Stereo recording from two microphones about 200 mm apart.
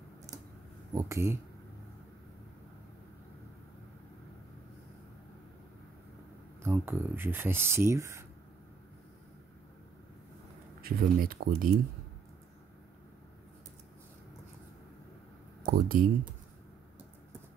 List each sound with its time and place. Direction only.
0.9 s speech: 15° right (ahead or behind)
6.6 s speech: 10° right (ahead or behind)
10.8 s speech: 50° right (ahead or behind)
15.6 s speech: 45° right (ahead or behind)